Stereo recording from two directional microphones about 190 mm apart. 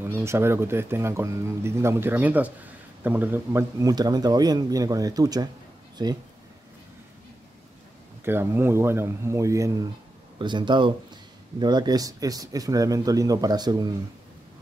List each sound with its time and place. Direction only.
0.0 s a man's voice: 15° right (ahead or behind)
8.3 s a man's voice: 10° right (ahead or behind)